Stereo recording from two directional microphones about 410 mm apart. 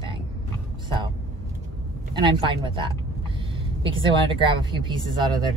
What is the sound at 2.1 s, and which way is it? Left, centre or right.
Speech, centre.